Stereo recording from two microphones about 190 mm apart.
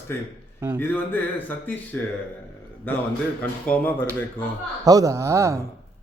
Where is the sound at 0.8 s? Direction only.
10° left (ahead or behind).